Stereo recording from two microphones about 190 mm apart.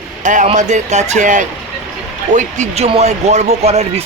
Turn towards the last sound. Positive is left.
turn(degrees=-35)  # may be behind; listen again after turning